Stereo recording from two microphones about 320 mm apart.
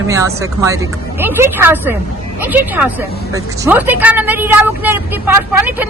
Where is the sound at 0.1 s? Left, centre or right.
Centre.